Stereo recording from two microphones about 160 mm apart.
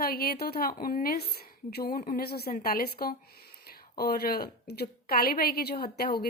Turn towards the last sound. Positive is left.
turn(degrees=85)